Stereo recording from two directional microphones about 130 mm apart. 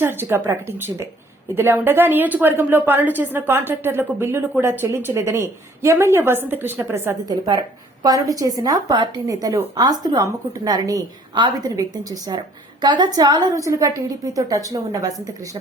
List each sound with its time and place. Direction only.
0.0 s a woman's voice: 15° right (ahead or behind)